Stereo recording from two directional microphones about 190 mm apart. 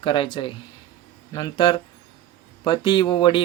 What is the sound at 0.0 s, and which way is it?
Speech, 25° left (ahead or behind).